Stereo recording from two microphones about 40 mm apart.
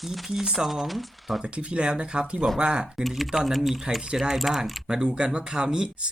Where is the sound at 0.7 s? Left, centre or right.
Centre.